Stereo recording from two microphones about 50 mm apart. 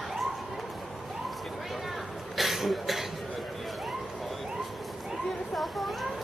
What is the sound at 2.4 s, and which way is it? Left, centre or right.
Cough, centre.